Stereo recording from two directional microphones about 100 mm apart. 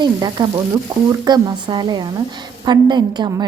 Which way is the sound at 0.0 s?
45° right (ahead or behind).